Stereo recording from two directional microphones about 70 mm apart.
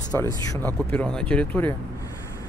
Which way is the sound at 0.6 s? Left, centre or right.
Left.